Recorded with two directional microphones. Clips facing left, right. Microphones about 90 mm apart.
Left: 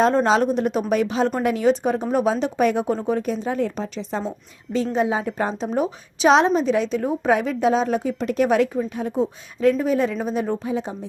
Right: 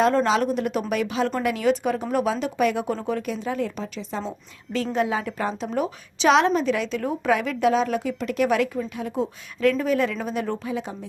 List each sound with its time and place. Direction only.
0.0 s a woman's voice: 25° left (ahead or behind)
3.2 s speech: 35° left (ahead or behind)
4.7 s a woman's voice: 25° left (ahead or behind)